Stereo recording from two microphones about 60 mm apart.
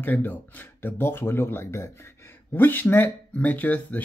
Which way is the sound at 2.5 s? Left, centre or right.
Left.